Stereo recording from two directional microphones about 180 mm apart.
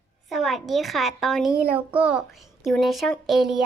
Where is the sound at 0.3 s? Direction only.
Centre (ahead or behind).